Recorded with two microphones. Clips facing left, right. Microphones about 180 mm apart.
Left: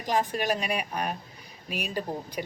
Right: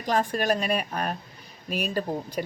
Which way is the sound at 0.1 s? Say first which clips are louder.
Right 2 dB; 15° left (ahead or behind).